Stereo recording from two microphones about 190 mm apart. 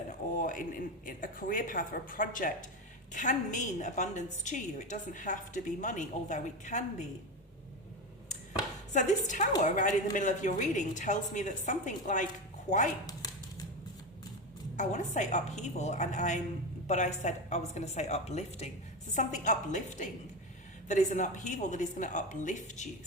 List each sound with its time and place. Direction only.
0.1 s a woman's voice: 45° left (ahead or behind)
8.9 s a woman's voice: 40° left (ahead or behind)
13.1 s dog: 20° left (ahead or behind)
14.8 s a woman's voice: 40° left (ahead or behind)